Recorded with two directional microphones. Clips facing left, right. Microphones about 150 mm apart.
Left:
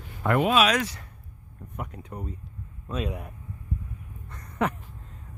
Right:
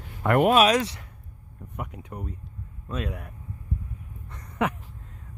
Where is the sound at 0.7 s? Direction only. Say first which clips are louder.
Right 3 dB; 25° right (ahead or behind).